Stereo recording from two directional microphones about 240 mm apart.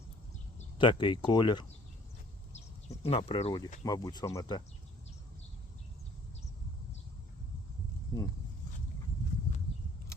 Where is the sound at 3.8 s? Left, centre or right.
Centre.